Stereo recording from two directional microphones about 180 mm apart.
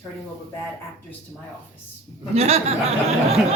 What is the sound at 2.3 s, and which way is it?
Speech, 35° right (ahead or behind).